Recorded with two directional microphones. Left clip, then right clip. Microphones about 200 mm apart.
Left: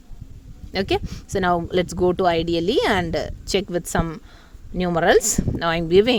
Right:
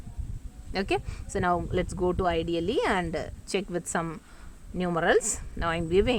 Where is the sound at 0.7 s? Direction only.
25° left (ahead or behind).